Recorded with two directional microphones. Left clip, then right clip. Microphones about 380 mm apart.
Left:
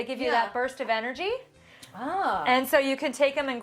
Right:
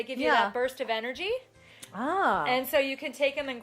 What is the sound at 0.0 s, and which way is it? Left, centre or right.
Speech, centre.